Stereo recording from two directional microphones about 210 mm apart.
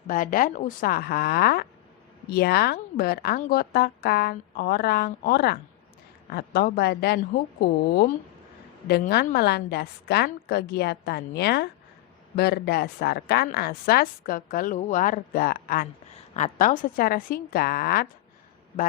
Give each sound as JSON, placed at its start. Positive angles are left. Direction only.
{"t": 0.1, "sound": "a woman's voice", "side_deg": 40}